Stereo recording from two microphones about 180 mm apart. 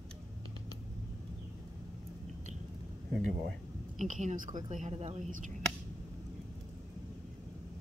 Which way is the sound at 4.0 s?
45° right (ahead or behind).